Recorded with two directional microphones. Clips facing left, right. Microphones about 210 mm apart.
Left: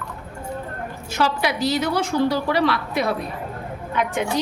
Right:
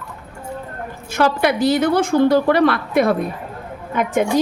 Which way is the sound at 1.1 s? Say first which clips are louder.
Right 5 dB; 50° right (ahead or behind).